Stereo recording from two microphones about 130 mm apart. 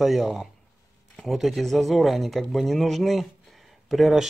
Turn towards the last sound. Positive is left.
turn(degrees=0)  # may be behind; listen again after turning